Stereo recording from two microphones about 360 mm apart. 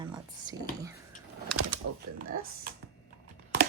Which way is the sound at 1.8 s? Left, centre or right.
Right.